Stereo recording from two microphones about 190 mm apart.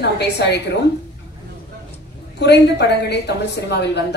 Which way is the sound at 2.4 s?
60° left (ahead or behind).